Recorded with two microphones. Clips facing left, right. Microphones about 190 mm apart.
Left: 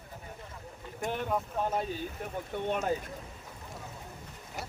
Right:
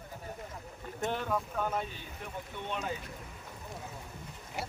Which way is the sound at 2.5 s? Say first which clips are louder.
Left 7 dB; 50° left (ahead or behind).